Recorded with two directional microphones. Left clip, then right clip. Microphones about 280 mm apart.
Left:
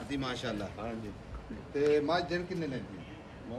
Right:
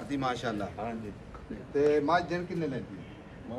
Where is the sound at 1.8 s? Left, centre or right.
Right.